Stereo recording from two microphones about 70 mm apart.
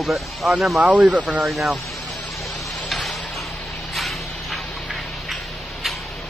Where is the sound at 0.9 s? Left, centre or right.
Centre.